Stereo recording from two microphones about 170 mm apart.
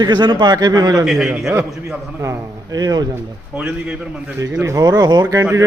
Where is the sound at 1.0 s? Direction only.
Centre (ahead or behind).